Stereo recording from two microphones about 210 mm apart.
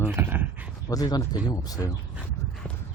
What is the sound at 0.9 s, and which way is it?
Speech, 20° left (ahead or behind).